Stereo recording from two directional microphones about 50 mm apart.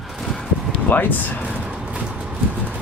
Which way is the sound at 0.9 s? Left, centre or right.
Left.